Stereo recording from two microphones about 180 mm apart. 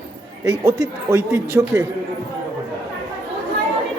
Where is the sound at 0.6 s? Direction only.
20° right (ahead or behind).